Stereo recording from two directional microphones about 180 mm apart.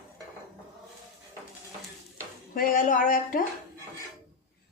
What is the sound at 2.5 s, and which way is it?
Speech, 50° left (ahead or behind).